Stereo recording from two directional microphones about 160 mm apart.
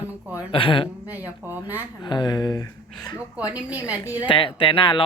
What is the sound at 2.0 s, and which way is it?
Speech, 30° left (ahead or behind).